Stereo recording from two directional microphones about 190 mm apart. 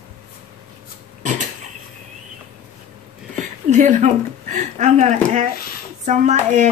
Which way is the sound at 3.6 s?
40° right (ahead or behind).